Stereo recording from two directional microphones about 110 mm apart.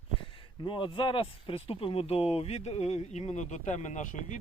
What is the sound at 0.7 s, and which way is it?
Speech, 50° left (ahead or behind).